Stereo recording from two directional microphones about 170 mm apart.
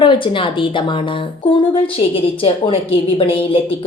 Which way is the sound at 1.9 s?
30° left (ahead or behind).